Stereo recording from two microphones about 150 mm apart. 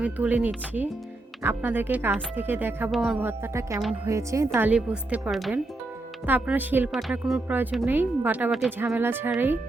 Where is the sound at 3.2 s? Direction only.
15° right (ahead or behind).